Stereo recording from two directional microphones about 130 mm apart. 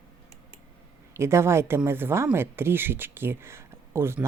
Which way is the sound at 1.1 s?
20° right (ahead or behind).